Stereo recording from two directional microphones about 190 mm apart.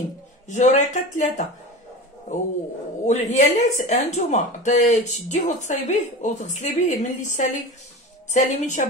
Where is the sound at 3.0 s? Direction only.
40° left (ahead or behind).